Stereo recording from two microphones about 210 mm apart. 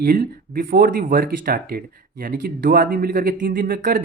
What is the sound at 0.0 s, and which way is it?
Speech, 45° right (ahead or behind).